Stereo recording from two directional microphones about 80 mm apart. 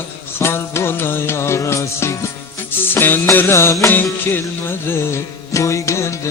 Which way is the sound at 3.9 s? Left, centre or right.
Left.